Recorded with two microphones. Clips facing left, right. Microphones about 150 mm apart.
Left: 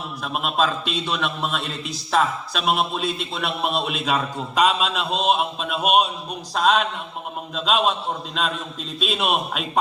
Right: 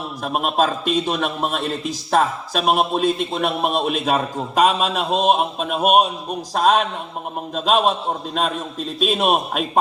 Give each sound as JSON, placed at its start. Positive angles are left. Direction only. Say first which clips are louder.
{"t": 0.2, "sound": "a man's voice", "louder": "right 3 dB", "side_deg": -40}
{"t": 9.0, "sound": "a man's voice", "louder": "right 4 dB", "side_deg": -40}